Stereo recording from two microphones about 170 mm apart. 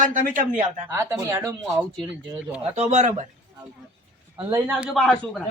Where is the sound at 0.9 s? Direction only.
15° right (ahead or behind).